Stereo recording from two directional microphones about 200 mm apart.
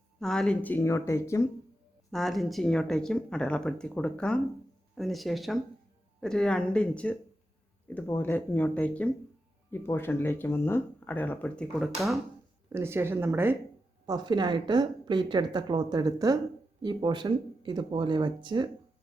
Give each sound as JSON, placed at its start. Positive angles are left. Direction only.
{"t": 0.2, "sound": "speech", "side_deg": 5}
{"t": 2.0, "sound": "speech", "side_deg": 0}
{"t": 12.7, "sound": "a woman's voice", "side_deg": -10}